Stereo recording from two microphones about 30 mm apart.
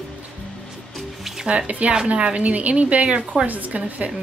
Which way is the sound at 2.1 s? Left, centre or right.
Right.